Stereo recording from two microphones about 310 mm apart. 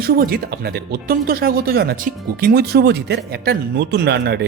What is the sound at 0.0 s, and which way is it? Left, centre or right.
A man's voice, right.